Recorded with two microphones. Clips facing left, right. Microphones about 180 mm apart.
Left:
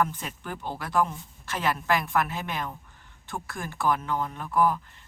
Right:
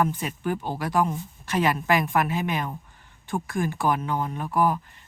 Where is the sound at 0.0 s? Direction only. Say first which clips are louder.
Right 4 dB; 15° right (ahead or behind).